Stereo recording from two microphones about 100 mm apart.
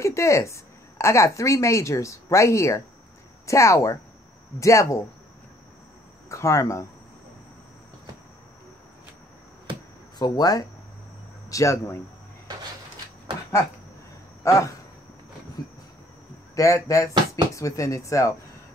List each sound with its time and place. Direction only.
0.0 s a woman's voice: 30° left (ahead or behind)
6.2 s speech: 30° left (ahead or behind)
10.1 s speech: 45° left (ahead or behind)
14.4 s a sound: 30° left (ahead or behind)
15.6 s insect: 45° left (ahead or behind)
16.5 s speech: 30° left (ahead or behind)